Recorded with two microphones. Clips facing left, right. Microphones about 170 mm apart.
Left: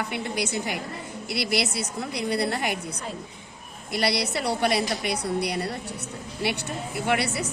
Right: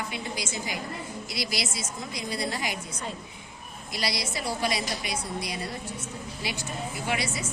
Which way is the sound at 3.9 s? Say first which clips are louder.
Left 7 dB; 60° left (ahead or behind).